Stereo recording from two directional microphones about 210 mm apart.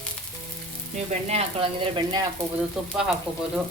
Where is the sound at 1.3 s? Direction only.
25° right (ahead or behind).